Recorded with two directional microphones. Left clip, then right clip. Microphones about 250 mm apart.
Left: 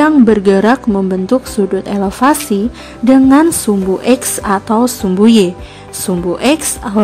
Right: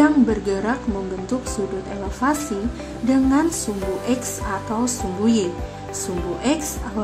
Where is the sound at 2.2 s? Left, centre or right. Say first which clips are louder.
Left 10 dB; left.